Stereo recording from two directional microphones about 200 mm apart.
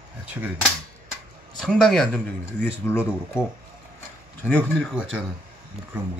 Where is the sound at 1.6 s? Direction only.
Centre (ahead or behind).